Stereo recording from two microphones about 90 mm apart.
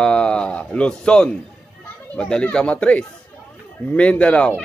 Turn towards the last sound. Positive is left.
turn(degrees=10)  # may be behind; listen again after turning